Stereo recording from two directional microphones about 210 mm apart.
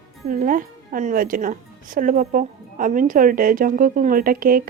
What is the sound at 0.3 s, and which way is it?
A woman's voice, 40° right (ahead or behind).